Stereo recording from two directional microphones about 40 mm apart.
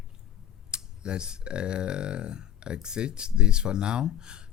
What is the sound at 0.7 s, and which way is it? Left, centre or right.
Speech, right.